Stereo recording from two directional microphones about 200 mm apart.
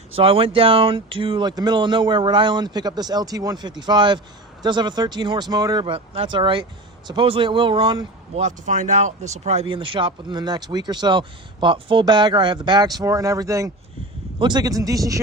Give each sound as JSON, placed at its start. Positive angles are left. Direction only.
{"t": 0.1, "sound": "speech", "side_deg": -25}
{"t": 8.4, "sound": "speech", "side_deg": -35}